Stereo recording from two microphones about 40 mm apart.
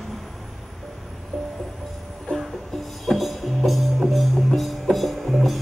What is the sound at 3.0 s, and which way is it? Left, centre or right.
Music, centre.